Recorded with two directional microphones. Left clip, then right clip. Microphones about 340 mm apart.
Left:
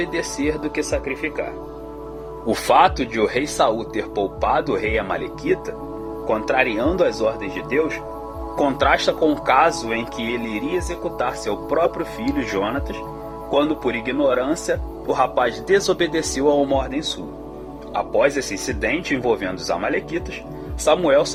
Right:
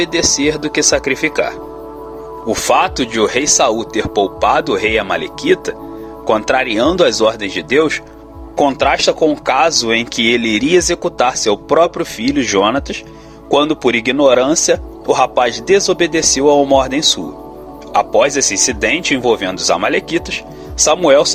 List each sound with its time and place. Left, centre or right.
0.0 s speech: centre
2.5 s speech: centre
18.1 s speech: centre